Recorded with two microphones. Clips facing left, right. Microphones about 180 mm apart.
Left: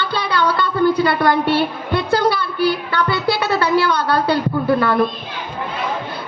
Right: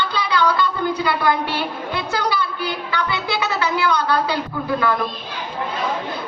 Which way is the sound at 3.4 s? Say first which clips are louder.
Left 5 dB; 60° left (ahead or behind).